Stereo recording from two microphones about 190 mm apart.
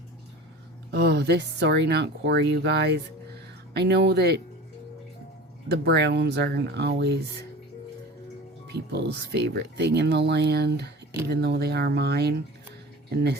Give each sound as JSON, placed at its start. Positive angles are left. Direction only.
{"t": 0.9, "sound": "speech", "side_deg": -60}
{"t": 5.6, "sound": "speech", "side_deg": -60}
{"t": 8.7, "sound": "speech", "side_deg": -60}